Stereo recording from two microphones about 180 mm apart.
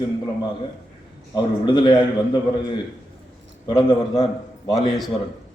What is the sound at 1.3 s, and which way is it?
A man's voice, 25° left (ahead or behind).